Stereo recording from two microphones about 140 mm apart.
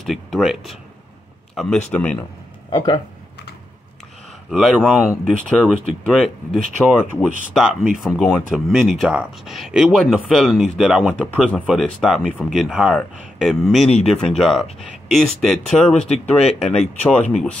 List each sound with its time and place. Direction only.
0.0 s a sound: centre (ahead or behind)
1.5 s a man's voice: 5° left (ahead or behind)
2.7 s speech: 35° left (ahead or behind)
4.5 s speech: centre (ahead or behind)
5.2 s speech: 5° left (ahead or behind)
16.0 s speech: 50° left (ahead or behind)